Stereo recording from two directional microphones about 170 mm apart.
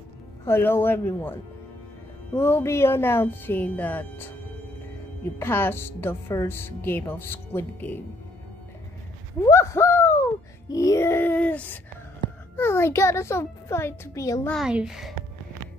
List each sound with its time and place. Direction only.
0.5 s speech: 15° left (ahead or behind)
9.4 s speech: 15° left (ahead or behind)
14.5 s speech: 5° right (ahead or behind)